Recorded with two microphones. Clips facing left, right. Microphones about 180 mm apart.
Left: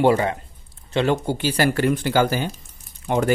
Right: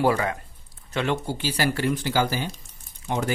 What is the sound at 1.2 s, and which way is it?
Speech, 55° left (ahead or behind).